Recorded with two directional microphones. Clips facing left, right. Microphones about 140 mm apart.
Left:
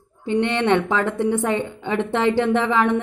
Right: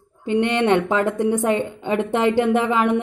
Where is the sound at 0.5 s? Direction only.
35° right (ahead or behind).